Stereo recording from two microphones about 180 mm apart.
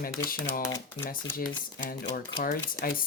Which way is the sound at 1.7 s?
50° left (ahead or behind).